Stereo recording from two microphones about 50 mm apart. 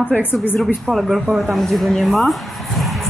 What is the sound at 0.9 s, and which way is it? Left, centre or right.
Speech, centre.